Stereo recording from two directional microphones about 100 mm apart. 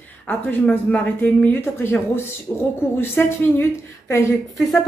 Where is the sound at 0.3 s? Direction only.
15° left (ahead or behind).